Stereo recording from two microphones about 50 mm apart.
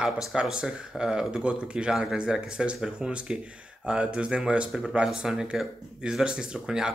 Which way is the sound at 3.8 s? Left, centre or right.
Right.